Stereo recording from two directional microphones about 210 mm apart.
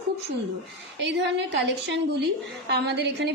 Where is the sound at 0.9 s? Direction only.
55° right (ahead or behind).